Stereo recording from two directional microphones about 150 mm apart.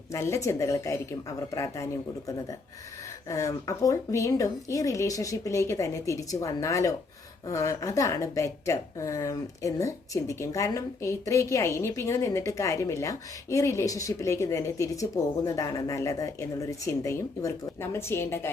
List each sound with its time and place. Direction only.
0.1 s a woman's voice: 20° left (ahead or behind)